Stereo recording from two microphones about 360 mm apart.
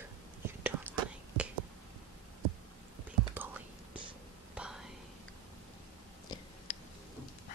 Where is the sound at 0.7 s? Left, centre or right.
Centre.